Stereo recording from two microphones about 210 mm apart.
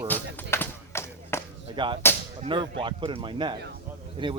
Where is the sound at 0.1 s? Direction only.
10° left (ahead or behind).